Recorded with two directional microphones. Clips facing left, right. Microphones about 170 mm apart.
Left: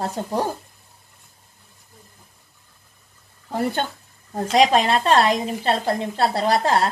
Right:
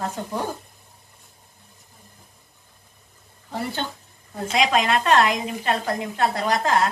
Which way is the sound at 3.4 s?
50° left (ahead or behind).